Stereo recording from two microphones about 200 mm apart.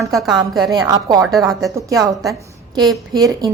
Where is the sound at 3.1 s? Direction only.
20° right (ahead or behind).